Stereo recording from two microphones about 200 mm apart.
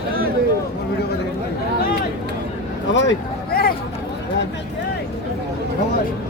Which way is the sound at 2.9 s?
65° left (ahead or behind).